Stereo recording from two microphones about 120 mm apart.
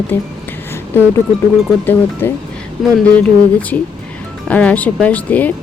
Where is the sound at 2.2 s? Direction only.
20° left (ahead or behind).